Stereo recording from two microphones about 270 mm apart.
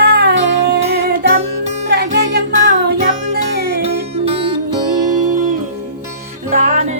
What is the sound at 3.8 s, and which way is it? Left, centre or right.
Music, right.